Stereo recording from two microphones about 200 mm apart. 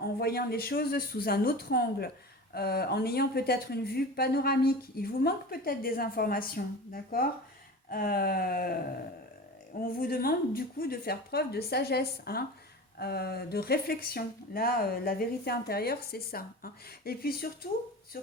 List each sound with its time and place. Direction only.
0.0 s speech: 50° left (ahead or behind)
9.8 s speech: 45° left (ahead or behind)